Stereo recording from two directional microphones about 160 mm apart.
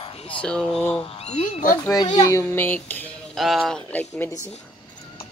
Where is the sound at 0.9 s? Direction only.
35° left (ahead or behind).